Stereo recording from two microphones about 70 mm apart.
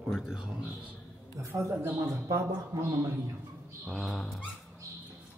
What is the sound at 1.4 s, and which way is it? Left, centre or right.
Speech, right.